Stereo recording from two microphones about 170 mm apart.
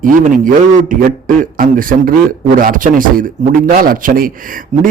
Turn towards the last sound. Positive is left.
turn(degrees=-55)  # may be behind; listen again after turning